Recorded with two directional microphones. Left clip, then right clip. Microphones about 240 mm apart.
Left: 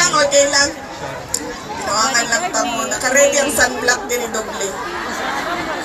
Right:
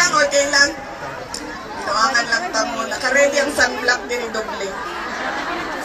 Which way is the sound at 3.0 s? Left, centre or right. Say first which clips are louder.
Left 2 dB; left.